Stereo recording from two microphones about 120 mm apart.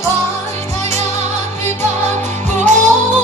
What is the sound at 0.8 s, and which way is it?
Music, 25° left (ahead or behind).